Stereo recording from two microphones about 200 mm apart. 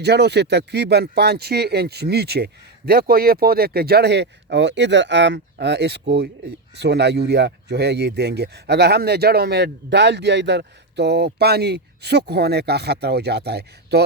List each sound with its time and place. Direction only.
0.0 s speech: 55° right (ahead or behind)